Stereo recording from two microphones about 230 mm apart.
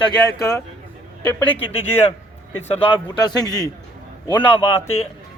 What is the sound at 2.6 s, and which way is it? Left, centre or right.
Speech, centre.